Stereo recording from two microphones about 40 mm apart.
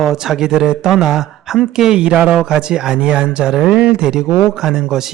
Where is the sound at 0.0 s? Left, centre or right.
Centre.